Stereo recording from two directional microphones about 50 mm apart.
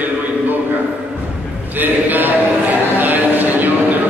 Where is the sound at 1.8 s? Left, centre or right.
Right.